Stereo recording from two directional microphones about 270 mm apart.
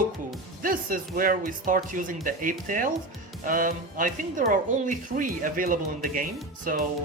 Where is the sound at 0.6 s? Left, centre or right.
Right.